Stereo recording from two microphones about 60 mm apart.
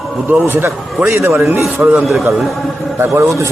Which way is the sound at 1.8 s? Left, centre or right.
Right.